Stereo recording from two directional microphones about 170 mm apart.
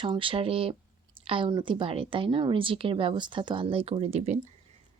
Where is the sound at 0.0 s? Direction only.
30° right (ahead or behind).